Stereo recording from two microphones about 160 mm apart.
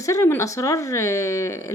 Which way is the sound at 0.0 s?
20° left (ahead or behind).